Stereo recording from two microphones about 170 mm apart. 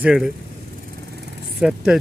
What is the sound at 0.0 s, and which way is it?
Speech, centre (ahead or behind).